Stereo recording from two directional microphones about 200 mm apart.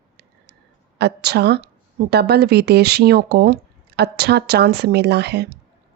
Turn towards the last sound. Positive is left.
turn(degrees=-55)  # may be behind; listen again after turning